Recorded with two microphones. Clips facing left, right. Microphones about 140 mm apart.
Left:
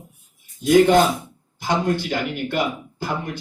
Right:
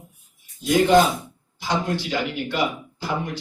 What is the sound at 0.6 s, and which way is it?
Speech, 50° left (ahead or behind).